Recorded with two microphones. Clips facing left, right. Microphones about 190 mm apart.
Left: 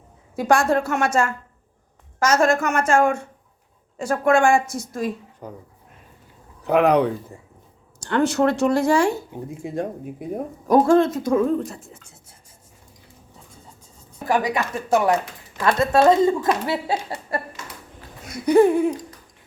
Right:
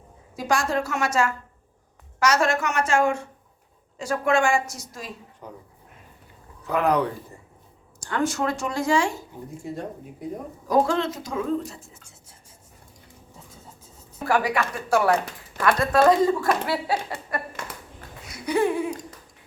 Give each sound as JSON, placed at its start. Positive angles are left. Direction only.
{"t": 0.3, "sound": "a woman's voice", "side_deg": 55}
{"t": 6.7, "sound": "speech", "side_deg": 65}
{"t": 8.0, "sound": "speech", "side_deg": 65}
{"t": 10.7, "sound": "a woman's voice", "side_deg": 50}
{"t": 14.3, "sound": "speech", "side_deg": 20}
{"t": 18.3, "sound": "a sound", "side_deg": 45}